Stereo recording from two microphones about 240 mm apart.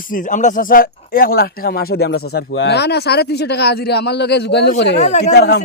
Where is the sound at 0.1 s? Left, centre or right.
Left.